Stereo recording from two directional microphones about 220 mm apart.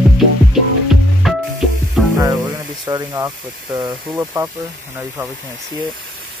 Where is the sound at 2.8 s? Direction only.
15° right (ahead or behind).